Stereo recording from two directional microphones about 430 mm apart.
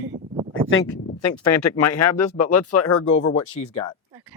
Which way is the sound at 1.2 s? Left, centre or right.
Left.